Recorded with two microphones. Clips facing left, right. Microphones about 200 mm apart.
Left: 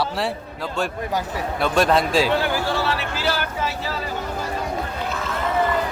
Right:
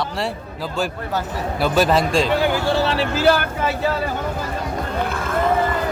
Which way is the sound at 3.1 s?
55° right (ahead or behind).